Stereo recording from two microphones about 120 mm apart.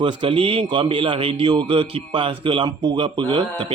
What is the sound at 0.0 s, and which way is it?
Speech, 45° right (ahead or behind).